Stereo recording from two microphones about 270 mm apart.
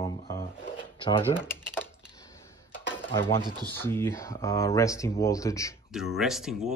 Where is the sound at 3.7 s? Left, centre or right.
Centre.